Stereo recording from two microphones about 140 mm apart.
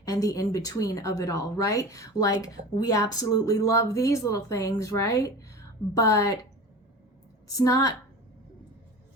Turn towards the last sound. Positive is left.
turn(degrees=25)  # may be behind; listen again after turning